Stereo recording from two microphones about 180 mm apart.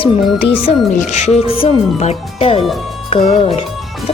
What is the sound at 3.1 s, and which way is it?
Speech, 35° left (ahead or behind).